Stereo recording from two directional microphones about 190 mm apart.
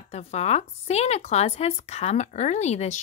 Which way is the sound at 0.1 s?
35° left (ahead or behind).